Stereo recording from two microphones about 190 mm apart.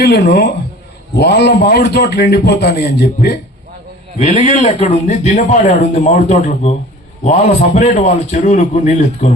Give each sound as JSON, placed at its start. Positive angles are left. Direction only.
{"t": 0.0, "sound": "a man's voice", "side_deg": 60}
{"t": 4.2, "sound": "a man's voice", "side_deg": 35}
{"t": 7.8, "sound": "a man's voice", "side_deg": 40}